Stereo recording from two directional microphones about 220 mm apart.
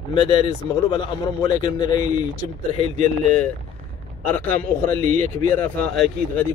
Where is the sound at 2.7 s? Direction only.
30° right (ahead or behind).